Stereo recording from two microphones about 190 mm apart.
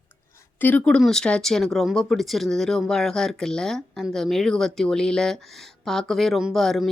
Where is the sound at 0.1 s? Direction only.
10° left (ahead or behind).